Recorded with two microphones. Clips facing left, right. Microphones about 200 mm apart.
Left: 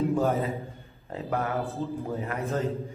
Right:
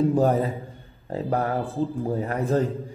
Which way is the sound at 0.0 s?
35° right (ahead or behind).